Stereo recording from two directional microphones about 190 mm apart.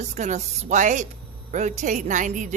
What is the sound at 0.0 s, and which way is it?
Speech, 35° right (ahead or behind).